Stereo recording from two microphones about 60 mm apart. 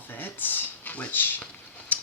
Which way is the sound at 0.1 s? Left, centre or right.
Left.